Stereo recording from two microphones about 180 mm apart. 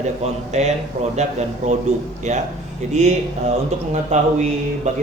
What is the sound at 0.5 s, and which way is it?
A man's voice, 40° right (ahead or behind).